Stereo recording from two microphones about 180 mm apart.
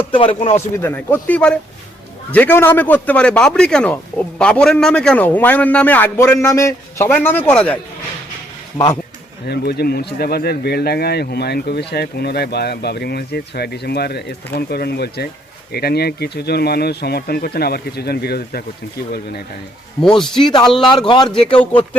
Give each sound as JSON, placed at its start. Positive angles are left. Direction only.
{"t": 0.1, "sound": "a man's voice", "side_deg": 30}
{"t": 0.8, "sound": "a man's voice", "side_deg": 10}
{"t": 9.5, "sound": "speech", "side_deg": 65}
{"t": 20.0, "sound": "speech", "side_deg": 5}
{"t": 20.4, "sound": "speech", "side_deg": 25}
{"t": 21.2, "sound": "a man's voice", "side_deg": 5}